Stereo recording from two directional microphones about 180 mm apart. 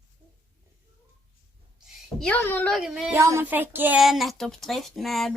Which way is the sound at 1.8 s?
5° left (ahead or behind).